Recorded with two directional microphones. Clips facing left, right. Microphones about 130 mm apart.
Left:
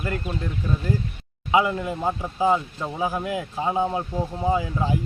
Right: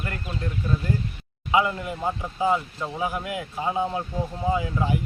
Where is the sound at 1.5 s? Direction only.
25° left (ahead or behind).